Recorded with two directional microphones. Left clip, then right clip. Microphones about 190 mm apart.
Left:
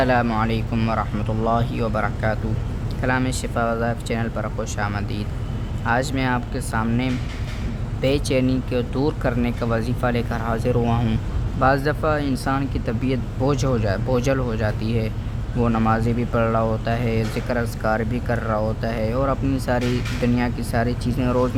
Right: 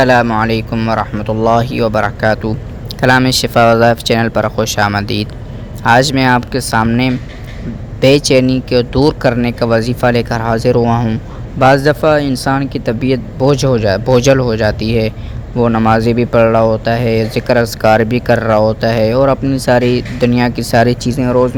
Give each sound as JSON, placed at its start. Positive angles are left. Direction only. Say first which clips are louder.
{"t": 0.0, "sound": "speech", "louder": "right 10 dB", "side_deg": -40}
{"t": 3.0, "sound": "speech", "louder": "right 13 dB", "side_deg": -50}
{"t": 11.6, "sound": "speech", "louder": "right 10 dB", "side_deg": -35}